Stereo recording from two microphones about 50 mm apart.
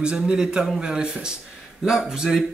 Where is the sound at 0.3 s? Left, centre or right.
Centre.